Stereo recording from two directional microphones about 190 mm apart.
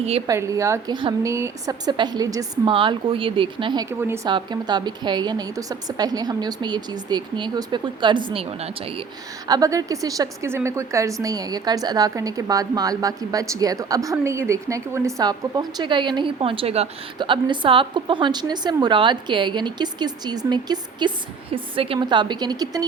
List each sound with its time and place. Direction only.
0.3 s a woman's voice: 15° right (ahead or behind)
4.3 s a woman's voice: 25° right (ahead or behind)
9.5 s a woman's voice: 15° right (ahead or behind)